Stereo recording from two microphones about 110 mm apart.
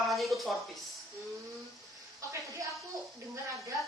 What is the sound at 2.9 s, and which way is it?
Speech, 30° right (ahead or behind).